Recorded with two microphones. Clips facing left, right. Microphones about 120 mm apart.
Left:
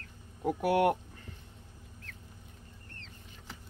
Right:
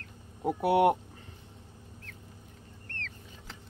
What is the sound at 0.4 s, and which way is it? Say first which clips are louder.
Speech: right 3 dB; 25° right (ahead or behind).